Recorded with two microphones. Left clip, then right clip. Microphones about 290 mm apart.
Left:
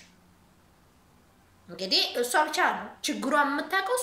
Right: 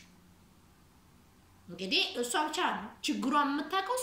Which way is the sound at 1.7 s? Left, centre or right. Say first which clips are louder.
Left 5 dB; centre.